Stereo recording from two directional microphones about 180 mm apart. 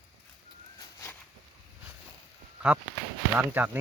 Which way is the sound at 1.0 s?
15° left (ahead or behind).